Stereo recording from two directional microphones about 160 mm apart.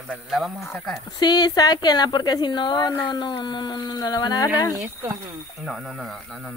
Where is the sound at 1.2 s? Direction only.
25° left (ahead or behind).